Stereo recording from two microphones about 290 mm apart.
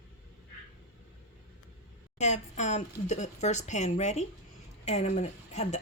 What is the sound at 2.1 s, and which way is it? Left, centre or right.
Speech, left.